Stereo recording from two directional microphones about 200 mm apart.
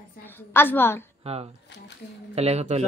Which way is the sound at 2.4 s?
30° right (ahead or behind).